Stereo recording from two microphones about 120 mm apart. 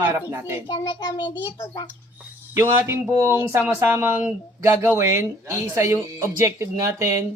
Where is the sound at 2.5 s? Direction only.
20° right (ahead or behind).